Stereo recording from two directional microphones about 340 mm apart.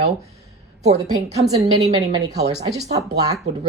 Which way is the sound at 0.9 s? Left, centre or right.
Centre.